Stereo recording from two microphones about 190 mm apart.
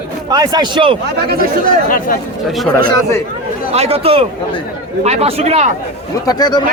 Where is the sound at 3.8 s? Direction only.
30° right (ahead or behind).